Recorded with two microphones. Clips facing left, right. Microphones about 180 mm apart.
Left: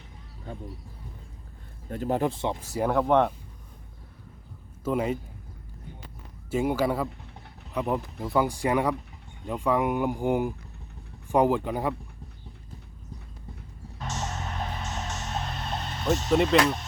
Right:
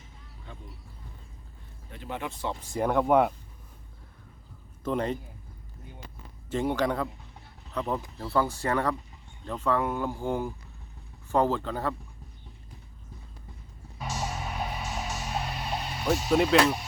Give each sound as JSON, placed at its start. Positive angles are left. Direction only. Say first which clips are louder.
{"t": 1.9, "sound": "speech", "louder": "left 10 dB", "side_deg": 40}
{"t": 2.7, "sound": "speech", "louder": "even", "side_deg": 5}
{"t": 4.8, "sound": "a man's voice", "louder": "left 2 dB", "side_deg": 5}
{"t": 6.5, "sound": "speech", "louder": "left 2 dB", "side_deg": 10}
{"t": 14.0, "sound": "music", "louder": "even", "side_deg": -5}